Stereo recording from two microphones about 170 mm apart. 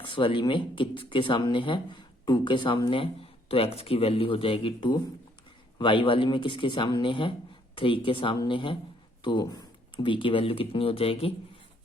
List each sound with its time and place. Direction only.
0.0 s speech: 30° left (ahead or behind)